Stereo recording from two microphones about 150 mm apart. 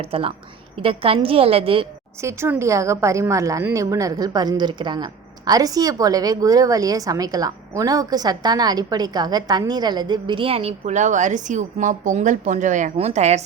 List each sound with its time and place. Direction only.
0.0 s a woman's voice: 40° right (ahead or behind)
2.2 s a woman's voice: 15° right (ahead or behind); by 13.4 s 50° right (ahead or behind)